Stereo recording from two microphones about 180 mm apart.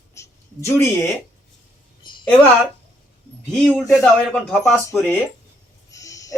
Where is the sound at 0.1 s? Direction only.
15° left (ahead or behind).